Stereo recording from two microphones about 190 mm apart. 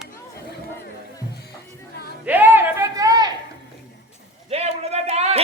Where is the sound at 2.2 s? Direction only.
10° right (ahead or behind).